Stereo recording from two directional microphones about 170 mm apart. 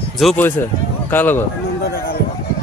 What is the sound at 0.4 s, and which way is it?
Speech, 10° left (ahead or behind).